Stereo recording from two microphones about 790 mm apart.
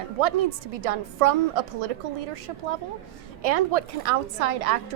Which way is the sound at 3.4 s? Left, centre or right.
Right.